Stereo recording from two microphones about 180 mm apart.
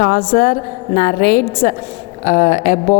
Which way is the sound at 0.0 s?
50° left (ahead or behind).